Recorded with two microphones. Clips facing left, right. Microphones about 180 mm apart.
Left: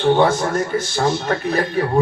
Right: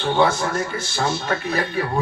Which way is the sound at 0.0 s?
40° left (ahead or behind).